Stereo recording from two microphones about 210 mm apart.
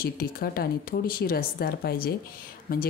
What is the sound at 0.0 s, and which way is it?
A woman's voice, 45° left (ahead or behind).